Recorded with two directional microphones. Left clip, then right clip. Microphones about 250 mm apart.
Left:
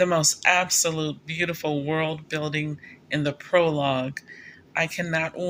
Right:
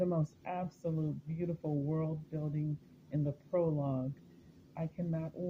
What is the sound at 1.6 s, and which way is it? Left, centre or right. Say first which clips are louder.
Speech: left 10 dB; left.